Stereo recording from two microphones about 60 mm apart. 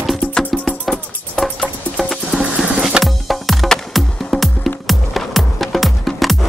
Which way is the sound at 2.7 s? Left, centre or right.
Centre.